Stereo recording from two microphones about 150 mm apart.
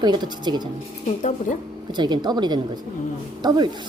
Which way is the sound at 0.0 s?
30° right (ahead or behind).